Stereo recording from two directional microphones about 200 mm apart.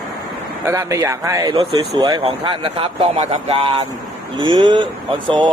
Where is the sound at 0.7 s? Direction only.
15° right (ahead or behind).